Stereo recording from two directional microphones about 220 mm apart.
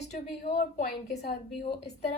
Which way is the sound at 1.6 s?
50° left (ahead or behind).